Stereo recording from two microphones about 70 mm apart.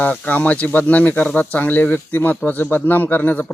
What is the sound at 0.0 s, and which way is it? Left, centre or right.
Speech, left.